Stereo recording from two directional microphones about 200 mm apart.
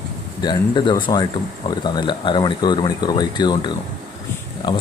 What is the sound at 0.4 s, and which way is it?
Speech, 25° left (ahead or behind).